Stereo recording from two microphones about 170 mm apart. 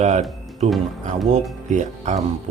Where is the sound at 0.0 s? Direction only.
45° right (ahead or behind).